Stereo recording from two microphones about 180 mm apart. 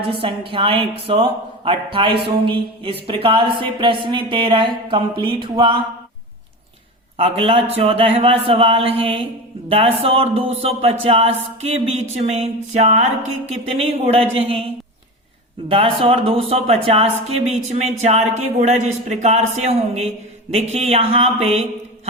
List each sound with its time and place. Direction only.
0.1 s a woman's voice: 30° right (ahead or behind)
7.2 s a woman's voice: 30° right (ahead or behind)
15.7 s a woman's voice: 30° right (ahead or behind)